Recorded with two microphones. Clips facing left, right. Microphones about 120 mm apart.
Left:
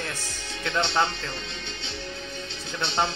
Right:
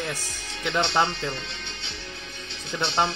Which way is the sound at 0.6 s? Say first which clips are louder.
Right 1 dB; 20° right (ahead or behind).